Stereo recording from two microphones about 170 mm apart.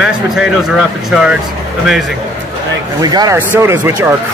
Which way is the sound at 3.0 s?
25° right (ahead or behind).